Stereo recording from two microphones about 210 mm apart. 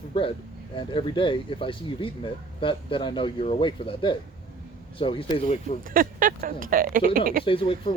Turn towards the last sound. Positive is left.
turn(degrees=25)  # may be behind; listen again after turning